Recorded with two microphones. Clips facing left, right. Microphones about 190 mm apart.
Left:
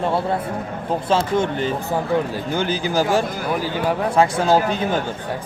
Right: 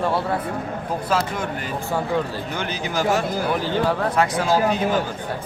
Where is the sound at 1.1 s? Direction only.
25° left (ahead or behind).